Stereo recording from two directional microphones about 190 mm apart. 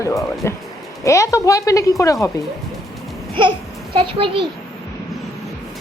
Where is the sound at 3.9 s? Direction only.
30° right (ahead or behind).